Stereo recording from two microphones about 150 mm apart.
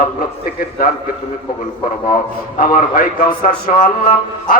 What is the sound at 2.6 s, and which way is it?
A man's voice, 70° left (ahead or behind).